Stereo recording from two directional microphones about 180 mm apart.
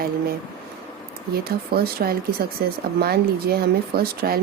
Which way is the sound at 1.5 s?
55° right (ahead or behind).